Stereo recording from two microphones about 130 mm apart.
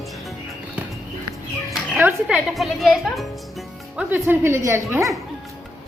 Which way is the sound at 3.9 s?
10° right (ahead or behind).